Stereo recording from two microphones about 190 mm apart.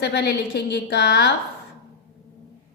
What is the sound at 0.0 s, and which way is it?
A woman's voice, 60° left (ahead or behind).